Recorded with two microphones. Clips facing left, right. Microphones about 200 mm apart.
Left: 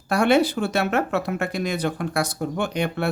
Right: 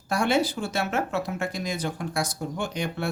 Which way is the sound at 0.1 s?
60° left (ahead or behind).